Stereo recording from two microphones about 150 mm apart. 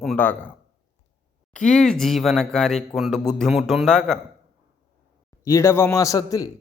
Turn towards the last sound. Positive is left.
turn(degrees=20)  # may be behind; listen again after turning